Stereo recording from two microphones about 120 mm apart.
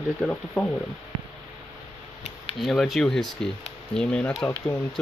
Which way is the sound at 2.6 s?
Centre (ahead or behind).